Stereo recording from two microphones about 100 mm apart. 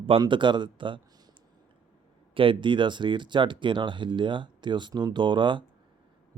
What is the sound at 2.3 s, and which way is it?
Speech, 60° right (ahead or behind).